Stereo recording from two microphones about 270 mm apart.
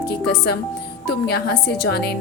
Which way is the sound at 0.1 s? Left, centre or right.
Left.